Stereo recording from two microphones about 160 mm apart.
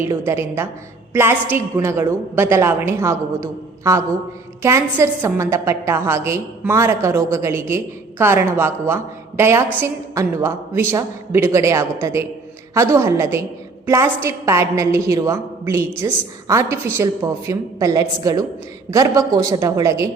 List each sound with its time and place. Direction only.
0.0 s a woman's voice: 15° right (ahead or behind)